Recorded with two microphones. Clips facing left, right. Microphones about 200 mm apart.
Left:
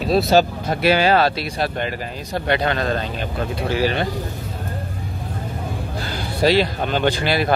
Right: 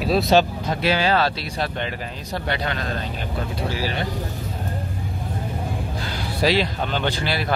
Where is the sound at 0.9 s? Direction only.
50° left (ahead or behind).